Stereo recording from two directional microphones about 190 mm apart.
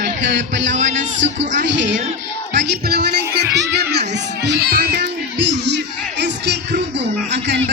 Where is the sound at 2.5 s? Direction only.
60° right (ahead or behind).